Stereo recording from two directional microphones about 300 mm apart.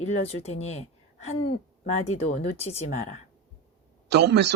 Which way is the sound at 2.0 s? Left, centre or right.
Left.